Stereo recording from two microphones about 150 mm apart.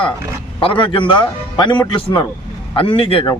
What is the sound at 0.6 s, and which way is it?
A man's voice, 35° left (ahead or behind).